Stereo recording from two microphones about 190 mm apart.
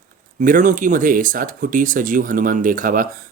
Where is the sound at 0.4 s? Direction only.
45° right (ahead or behind).